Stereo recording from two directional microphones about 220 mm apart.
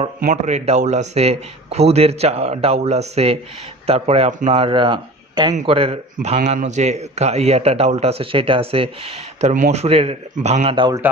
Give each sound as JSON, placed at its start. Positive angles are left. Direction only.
{"t": 0.2, "sound": "a man's voice", "side_deg": -35}